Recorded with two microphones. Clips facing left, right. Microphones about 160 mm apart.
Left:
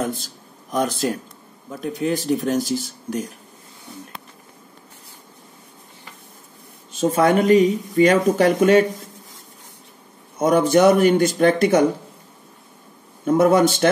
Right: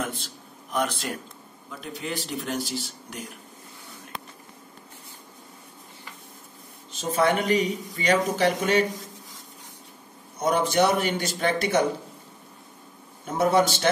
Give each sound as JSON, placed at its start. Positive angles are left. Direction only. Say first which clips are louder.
{"t": 0.0, "sound": "a sound", "louder": "left 6 dB", "side_deg": 40}
{"t": 1.7, "sound": "speech", "louder": "left 10 dB", "side_deg": 45}
{"t": 7.0, "sound": "speech", "louder": "left 6 dB", "side_deg": 50}
{"t": 10.4, "sound": "speech", "louder": "left 7 dB", "side_deg": 50}
{"t": 13.3, "sound": "speech", "louder": "left 6 dB", "side_deg": 50}